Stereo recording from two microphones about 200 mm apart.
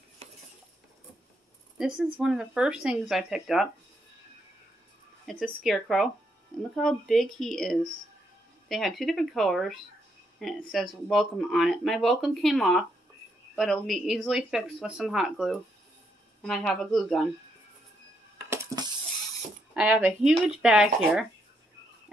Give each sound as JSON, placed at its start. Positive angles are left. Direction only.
{"t": 1.8, "sound": "speech", "side_deg": -5}
{"t": 5.2, "sound": "speech", "side_deg": 0}
{"t": 18.5, "sound": "coin", "side_deg": -15}
{"t": 19.7, "sound": "speech", "side_deg": -5}